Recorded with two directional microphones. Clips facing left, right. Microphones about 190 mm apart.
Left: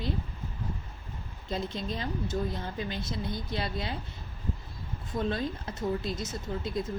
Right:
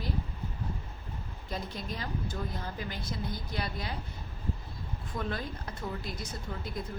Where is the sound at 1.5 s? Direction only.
25° left (ahead or behind).